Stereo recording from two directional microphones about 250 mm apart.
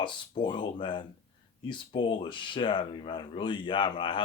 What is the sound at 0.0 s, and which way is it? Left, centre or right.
Speech, centre.